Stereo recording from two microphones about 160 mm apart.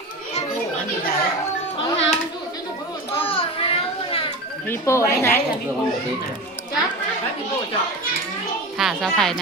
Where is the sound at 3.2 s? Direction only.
35° left (ahead or behind).